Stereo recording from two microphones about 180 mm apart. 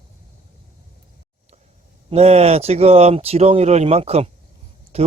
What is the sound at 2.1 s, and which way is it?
Speech, 35° right (ahead or behind).